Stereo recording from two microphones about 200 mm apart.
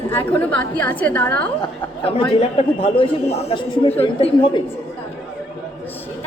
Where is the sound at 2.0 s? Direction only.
25° left (ahead or behind).